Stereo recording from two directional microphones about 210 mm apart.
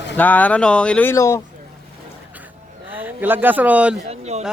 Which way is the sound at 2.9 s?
10° right (ahead or behind).